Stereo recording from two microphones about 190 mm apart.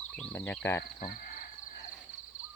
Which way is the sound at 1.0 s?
45° left (ahead or behind).